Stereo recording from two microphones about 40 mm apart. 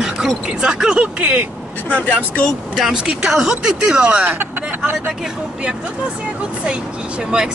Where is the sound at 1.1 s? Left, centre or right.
Right.